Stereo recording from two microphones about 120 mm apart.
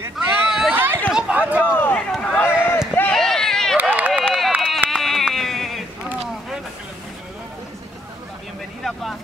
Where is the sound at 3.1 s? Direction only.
5° left (ahead or behind).